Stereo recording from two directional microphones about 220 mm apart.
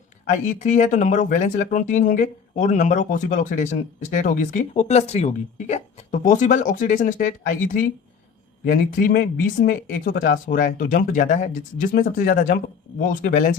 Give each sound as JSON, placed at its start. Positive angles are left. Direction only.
{"t": 0.3, "sound": "speech", "side_deg": 35}